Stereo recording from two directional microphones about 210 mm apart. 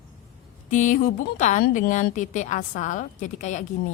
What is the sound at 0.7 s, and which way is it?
A woman's voice, 35° left (ahead or behind).